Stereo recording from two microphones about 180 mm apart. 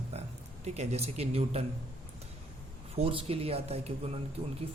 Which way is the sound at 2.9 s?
30° right (ahead or behind).